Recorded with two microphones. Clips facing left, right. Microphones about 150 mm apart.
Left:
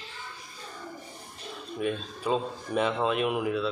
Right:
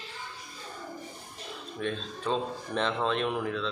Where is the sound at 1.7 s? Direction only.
10° left (ahead or behind).